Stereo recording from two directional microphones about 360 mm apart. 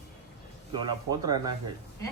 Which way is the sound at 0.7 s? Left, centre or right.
Centre.